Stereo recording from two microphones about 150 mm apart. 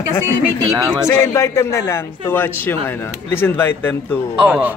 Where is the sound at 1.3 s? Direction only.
20° left (ahead or behind).